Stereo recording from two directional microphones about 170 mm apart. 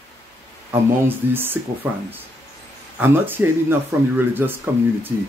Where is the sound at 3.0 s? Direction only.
10° right (ahead or behind).